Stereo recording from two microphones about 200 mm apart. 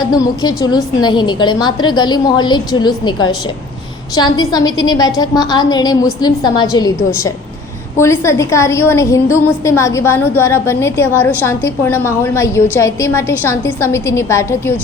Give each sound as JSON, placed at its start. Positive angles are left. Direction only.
{"t": 0.0, "sound": "a woman's voice", "side_deg": 20}